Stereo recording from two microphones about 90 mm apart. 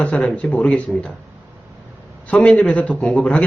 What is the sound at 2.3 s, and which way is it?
Speech, 15° left (ahead or behind).